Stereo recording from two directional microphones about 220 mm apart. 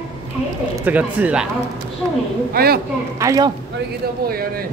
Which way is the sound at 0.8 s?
5° right (ahead or behind).